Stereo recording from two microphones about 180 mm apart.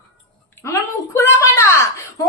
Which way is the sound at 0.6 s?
15° left (ahead or behind).